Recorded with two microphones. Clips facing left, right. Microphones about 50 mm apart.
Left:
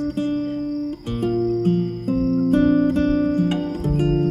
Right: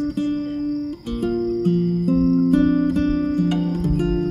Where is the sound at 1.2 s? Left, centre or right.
Centre.